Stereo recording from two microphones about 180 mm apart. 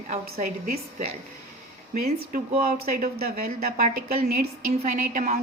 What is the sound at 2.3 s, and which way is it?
A woman's voice, 55° right (ahead or behind).